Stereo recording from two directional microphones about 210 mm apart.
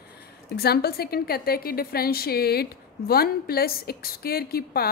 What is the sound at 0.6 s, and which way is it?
A woman's voice, 50° left (ahead or behind).